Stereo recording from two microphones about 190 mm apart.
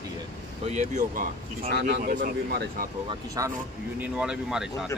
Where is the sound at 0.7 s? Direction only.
40° right (ahead or behind).